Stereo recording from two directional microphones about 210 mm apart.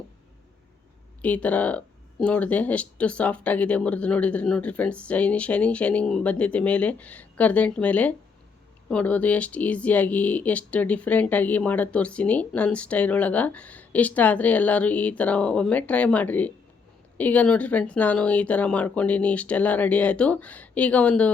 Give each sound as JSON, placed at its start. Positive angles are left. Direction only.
{"t": 1.2, "sound": "speech", "side_deg": 5}